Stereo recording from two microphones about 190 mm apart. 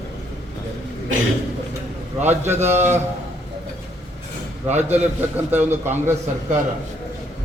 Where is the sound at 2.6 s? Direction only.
35° right (ahead or behind).